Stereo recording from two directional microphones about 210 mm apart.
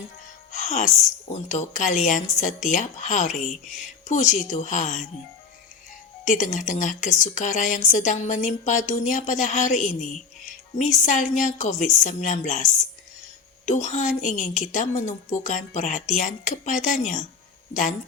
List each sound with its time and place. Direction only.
0.5 s music: 35° left (ahead or behind)
1.3 s a woman's voice: 35° left (ahead or behind)
6.2 s a woman's voice: 35° left (ahead or behind)
13.7 s a woman's voice: 35° left (ahead or behind)